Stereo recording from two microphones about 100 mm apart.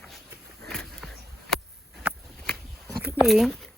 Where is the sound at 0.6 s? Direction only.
5° left (ahead or behind).